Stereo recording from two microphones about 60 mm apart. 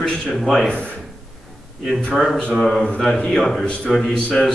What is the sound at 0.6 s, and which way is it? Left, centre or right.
Speech, centre.